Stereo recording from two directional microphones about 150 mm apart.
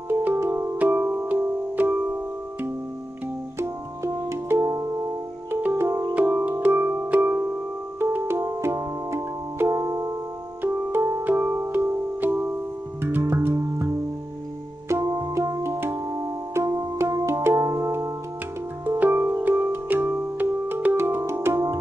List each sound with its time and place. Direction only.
0.1 s music: 15° right (ahead or behind)
3.5 s music: 20° right (ahead or behind)